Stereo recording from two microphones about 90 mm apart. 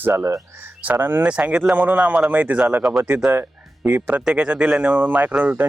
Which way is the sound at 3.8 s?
25° right (ahead or behind).